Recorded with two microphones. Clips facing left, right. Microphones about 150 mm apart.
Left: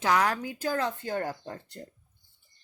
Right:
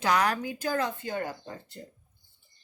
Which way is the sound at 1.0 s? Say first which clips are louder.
Left 2 dB; 40° left (ahead or behind).